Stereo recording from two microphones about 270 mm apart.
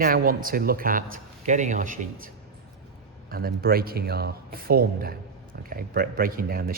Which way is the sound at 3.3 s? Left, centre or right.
Right.